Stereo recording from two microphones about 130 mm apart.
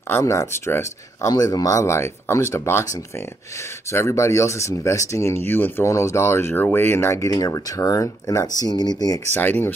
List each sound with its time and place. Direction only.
0.1 s speech: 20° left (ahead or behind)
9.3 s speech: 15° left (ahead or behind)